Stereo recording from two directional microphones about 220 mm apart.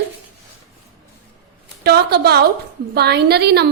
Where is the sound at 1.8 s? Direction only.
45° right (ahead or behind).